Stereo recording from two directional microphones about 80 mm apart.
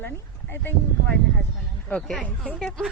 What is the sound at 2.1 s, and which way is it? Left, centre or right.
Speech, centre.